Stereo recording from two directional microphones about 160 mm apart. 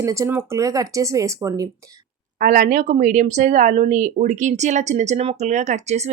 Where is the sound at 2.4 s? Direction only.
55° right (ahead or behind).